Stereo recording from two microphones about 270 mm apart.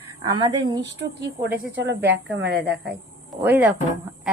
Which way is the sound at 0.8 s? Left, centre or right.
Right.